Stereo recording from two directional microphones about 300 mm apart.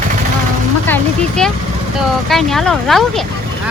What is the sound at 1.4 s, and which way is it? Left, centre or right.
Speech, centre.